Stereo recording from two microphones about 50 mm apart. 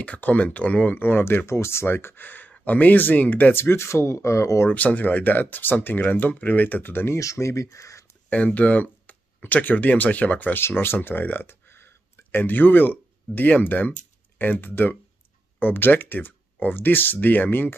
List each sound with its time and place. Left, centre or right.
0.0 s speech: left
1.9 s speech: left
3.7 s speech: left
4.6 s speech: left
7.2 s speech: left
8.3 s speech: left
10.5 s speech: left